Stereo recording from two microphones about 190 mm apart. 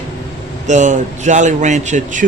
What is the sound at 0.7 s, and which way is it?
A man's voice, 40° right (ahead or behind).